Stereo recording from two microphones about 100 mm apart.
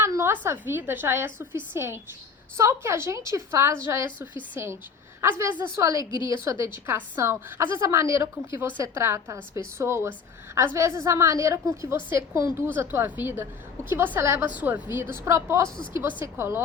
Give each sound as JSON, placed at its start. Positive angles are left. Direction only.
{"t": 0.0, "sound": "a woman's voice", "side_deg": -25}
{"t": 6.0, "sound": "a woman's voice", "side_deg": 50}
{"t": 6.3, "sound": "a woman's voice", "side_deg": -30}
{"t": 14.4, "sound": "a woman's voice", "side_deg": -15}